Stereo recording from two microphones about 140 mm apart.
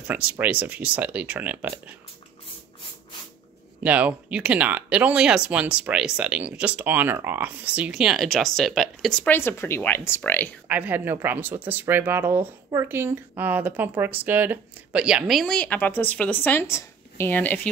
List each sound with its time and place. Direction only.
0.0 s speech: 10° right (ahead or behind)
3.8 s speech: 10° right (ahead or behind)
9.2 s speech: 15° left (ahead or behind)
10.7 s speech: 10° right (ahead or behind); by 17.6 s 15° left (ahead or behind)